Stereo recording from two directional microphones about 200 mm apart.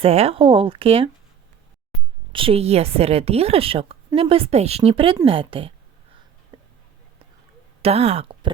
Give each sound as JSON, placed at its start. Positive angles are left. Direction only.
{"t": 0.0, "sound": "a woman's voice", "side_deg": -30}
{"t": 2.3, "sound": "a woman's voice", "side_deg": -25}
{"t": 6.5, "sound": "a sound", "side_deg": -25}
{"t": 7.8, "sound": "speech", "side_deg": -30}